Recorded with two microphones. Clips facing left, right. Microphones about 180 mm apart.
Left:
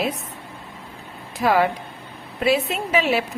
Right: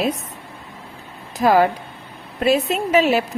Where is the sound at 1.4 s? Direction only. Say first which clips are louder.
Right 3 dB; 40° right (ahead or behind).